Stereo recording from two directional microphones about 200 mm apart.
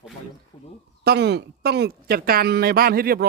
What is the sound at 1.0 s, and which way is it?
Speech, 55° right (ahead or behind).